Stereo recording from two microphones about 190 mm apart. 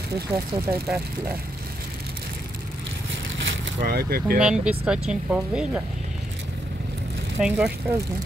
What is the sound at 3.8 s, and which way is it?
Speech, 55° right (ahead or behind).